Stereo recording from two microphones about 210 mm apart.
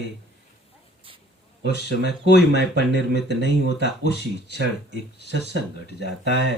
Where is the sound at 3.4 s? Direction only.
55° right (ahead or behind).